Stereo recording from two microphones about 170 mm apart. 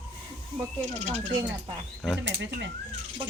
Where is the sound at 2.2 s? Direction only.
90° right.